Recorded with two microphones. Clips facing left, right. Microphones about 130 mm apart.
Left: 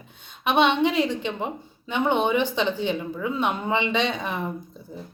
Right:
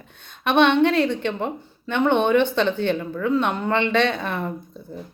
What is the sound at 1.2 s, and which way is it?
Speech, 10° left (ahead or behind).